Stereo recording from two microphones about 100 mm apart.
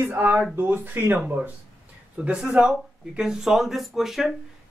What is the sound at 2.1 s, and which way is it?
Speech, 10° right (ahead or behind).